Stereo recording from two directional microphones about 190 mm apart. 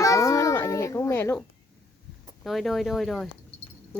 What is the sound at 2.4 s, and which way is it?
Speech, centre (ahead or behind).